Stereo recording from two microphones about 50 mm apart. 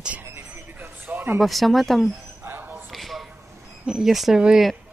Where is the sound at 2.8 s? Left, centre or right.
Centre.